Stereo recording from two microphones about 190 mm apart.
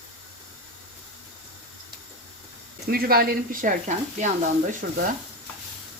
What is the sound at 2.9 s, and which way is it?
Speech, 50° right (ahead or behind).